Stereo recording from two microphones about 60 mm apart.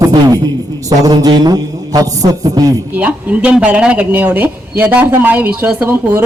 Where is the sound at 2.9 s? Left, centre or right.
Right.